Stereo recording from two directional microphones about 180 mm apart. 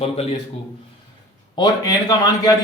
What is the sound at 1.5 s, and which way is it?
Speech, 20° left (ahead or behind).